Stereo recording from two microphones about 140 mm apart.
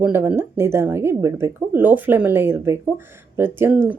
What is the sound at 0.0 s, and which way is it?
Speech, 15° right (ahead or behind).